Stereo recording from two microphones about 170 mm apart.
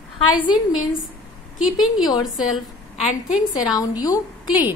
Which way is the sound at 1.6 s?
5° right (ahead or behind).